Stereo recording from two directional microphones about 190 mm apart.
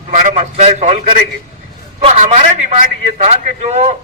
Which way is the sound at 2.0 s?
35° right (ahead or behind).